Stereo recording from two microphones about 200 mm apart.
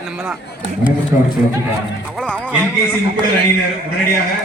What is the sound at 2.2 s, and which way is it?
Speech, 5° left (ahead or behind).